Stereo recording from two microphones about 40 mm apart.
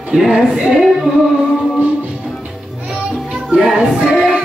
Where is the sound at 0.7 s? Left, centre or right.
Centre.